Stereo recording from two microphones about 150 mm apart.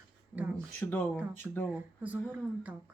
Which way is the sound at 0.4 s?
10° right (ahead or behind).